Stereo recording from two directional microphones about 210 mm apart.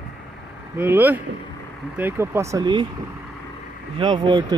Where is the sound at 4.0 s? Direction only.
20° right (ahead or behind).